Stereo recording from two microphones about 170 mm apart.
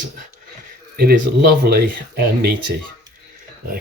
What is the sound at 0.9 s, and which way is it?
Speech, 60° right (ahead or behind).